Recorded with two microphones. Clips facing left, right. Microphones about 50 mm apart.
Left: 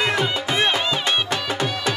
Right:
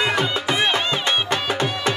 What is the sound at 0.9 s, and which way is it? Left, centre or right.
Music, right.